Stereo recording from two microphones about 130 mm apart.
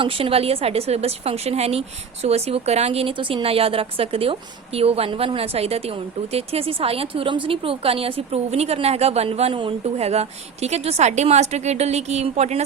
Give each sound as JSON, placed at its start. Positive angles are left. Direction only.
{"t": 0.0, "sound": "speech", "side_deg": -45}